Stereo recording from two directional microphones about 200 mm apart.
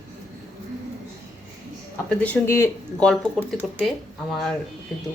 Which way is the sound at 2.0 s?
5° left (ahead or behind).